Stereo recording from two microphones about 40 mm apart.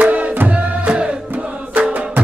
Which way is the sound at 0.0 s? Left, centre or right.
Right.